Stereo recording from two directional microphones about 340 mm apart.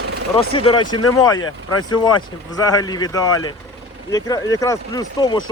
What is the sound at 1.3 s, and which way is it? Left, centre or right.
Speech, left.